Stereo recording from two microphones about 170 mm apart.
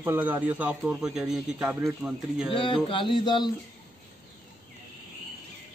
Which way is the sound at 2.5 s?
30° left (ahead or behind).